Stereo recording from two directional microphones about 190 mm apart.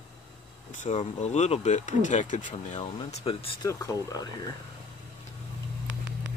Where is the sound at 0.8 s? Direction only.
35° left (ahead or behind).